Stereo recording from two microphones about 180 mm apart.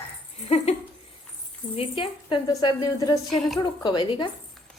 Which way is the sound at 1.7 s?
30° left (ahead or behind).